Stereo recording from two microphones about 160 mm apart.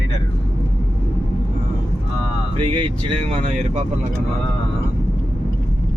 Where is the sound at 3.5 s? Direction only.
45° right (ahead or behind).